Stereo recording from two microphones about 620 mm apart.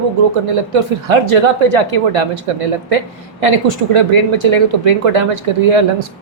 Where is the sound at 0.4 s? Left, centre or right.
Right.